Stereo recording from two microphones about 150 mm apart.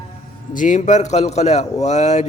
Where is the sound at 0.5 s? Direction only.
60° left (ahead or behind).